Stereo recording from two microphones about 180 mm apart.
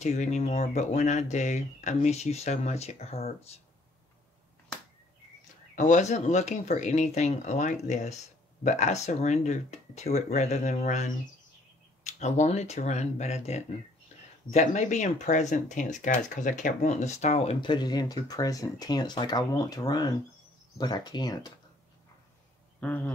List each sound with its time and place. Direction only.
0.0 s speech: 40° left (ahead or behind)
5.8 s speech: 40° left (ahead or behind); by 21.5 s 20° left (ahead or behind)
22.8 s speech: 10° left (ahead or behind)